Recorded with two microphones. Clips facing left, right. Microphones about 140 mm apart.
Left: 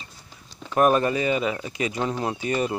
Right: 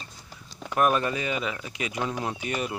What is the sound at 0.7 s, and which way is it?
Speech, 40° left (ahead or behind).